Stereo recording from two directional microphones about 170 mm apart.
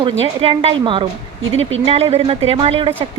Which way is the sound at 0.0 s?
30° right (ahead or behind).